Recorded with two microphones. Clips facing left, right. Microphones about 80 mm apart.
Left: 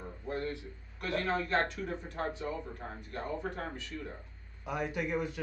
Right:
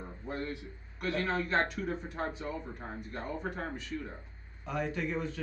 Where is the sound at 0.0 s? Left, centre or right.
Centre.